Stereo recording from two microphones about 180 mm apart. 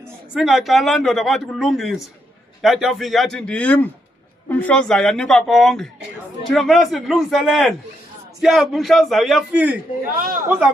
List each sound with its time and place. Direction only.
0.3 s a man's voice: centre (ahead or behind)
10.2 s a man's voice: 50° right (ahead or behind)